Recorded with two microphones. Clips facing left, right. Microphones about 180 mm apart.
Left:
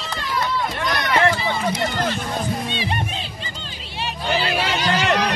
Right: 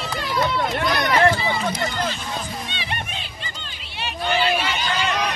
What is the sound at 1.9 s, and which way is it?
Music, 55° left (ahead or behind).